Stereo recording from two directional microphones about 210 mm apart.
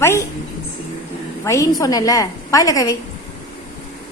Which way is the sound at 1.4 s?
15° left (ahead or behind).